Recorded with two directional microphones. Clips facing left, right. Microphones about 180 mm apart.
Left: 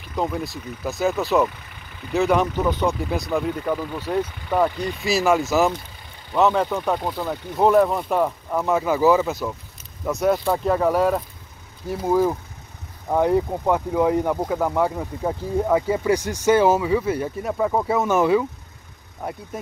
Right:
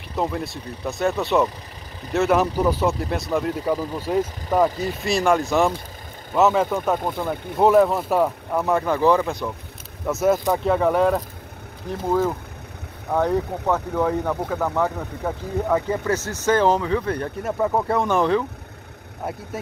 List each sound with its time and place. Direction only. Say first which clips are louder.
0.1 s speech: even; centre (ahead or behind)
3.7 s speech: right 1 dB; 35° right (ahead or behind)
4.7 s speech: even; centre (ahead or behind)
19.5 s speech: right 1 dB; 5° right (ahead or behind)